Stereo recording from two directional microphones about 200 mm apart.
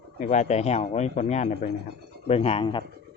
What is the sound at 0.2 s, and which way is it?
Speech, 35° left (ahead or behind).